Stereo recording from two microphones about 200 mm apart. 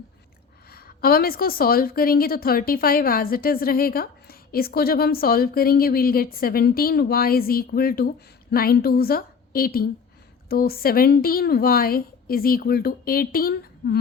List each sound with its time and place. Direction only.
0.7 s a woman's voice: 50° left (ahead or behind)